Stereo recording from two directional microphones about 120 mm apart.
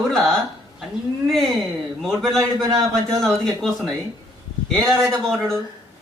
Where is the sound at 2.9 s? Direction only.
5° left (ahead or behind).